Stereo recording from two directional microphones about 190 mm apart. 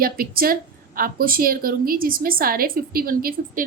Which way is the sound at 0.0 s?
50° right (ahead or behind).